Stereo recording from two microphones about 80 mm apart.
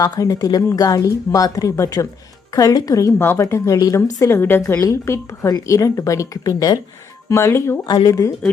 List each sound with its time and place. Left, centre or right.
0.0 s speech: left
3.2 s speech: left
3.4 s speech: left
3.9 s a woman's voice: left
4.8 s speech: left
5.1 s a woman's voice: left
7.3 s a woman's voice: left
7.9 s speech: left